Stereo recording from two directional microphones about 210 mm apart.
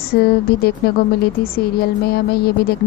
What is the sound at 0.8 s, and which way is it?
A woman's voice, 50° left (ahead or behind).